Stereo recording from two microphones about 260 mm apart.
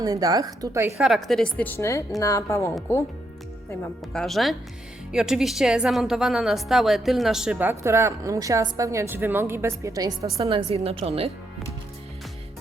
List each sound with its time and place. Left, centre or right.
0.0 s a woman's voice: centre
4.1 s a woman's voice: centre; by 11.3 s right